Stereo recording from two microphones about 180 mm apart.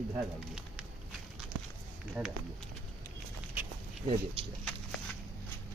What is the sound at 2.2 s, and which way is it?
Speech, 10° right (ahead or behind).